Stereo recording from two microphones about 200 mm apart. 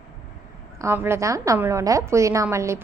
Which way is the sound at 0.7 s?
10° right (ahead or behind).